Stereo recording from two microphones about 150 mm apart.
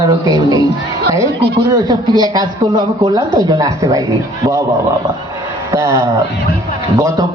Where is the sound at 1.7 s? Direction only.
25° right (ahead or behind).